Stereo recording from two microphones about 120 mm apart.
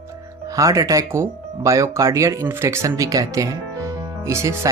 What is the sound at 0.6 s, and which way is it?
Speech, 30° right (ahead or behind).